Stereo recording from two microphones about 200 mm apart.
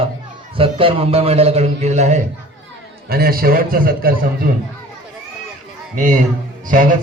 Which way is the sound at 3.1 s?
50° right (ahead or behind).